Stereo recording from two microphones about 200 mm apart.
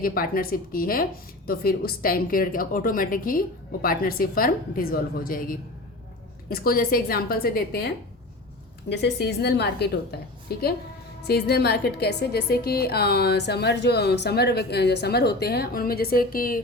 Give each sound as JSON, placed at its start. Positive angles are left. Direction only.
{"t": 0.0, "sound": "a woman's voice", "side_deg": 45}